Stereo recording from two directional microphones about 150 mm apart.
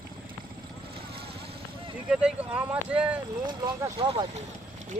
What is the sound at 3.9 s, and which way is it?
Speech, 35° right (ahead or behind).